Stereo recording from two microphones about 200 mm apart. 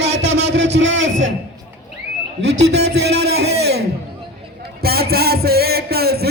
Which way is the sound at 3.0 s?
55° right (ahead or behind).